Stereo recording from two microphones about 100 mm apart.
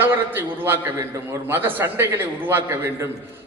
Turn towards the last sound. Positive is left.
turn(degrees=-20)  # may be behind; listen again after turning